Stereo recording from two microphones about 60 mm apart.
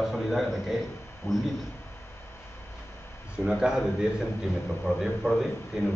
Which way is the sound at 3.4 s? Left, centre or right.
Centre.